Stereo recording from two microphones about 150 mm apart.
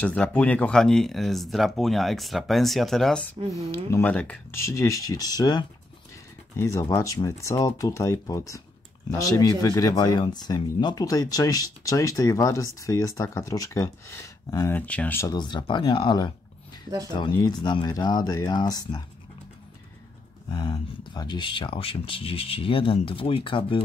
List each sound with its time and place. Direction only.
0.0 s speech: 10° left (ahead or behind)
4.7 s speech: 20° left (ahead or behind)
15.3 s speech: 30° left (ahead or behind)
20.4 s speech: 30° left (ahead or behind)